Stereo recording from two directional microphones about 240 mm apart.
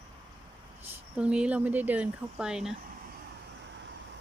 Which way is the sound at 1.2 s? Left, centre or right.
Centre.